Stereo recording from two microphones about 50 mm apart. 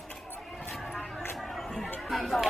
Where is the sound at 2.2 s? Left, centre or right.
Centre.